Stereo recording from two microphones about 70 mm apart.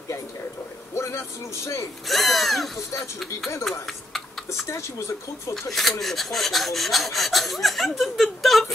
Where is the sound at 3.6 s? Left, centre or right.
Centre.